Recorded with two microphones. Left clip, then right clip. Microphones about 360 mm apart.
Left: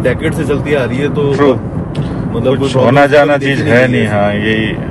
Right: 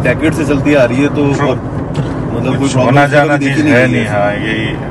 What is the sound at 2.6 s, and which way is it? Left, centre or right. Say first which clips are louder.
A man's voice: left 1 dB; left.